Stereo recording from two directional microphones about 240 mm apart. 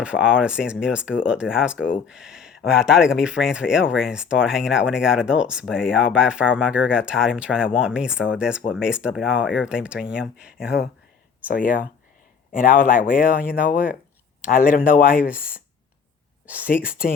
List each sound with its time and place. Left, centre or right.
0.0 s speech: centre
11.4 s speech: left